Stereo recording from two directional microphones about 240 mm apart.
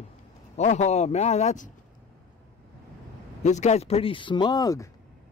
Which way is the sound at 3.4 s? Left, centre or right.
Left.